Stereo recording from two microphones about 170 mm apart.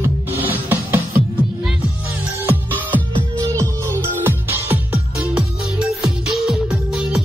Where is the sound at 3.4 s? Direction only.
20° right (ahead or behind).